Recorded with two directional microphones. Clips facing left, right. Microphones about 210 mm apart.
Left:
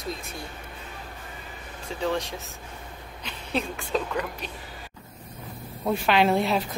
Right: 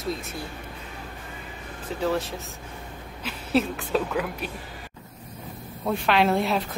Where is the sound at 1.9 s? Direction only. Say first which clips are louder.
Right 2 dB; 5° right (ahead or behind).